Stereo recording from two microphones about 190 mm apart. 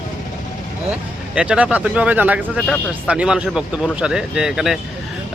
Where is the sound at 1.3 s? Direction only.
5° right (ahead or behind).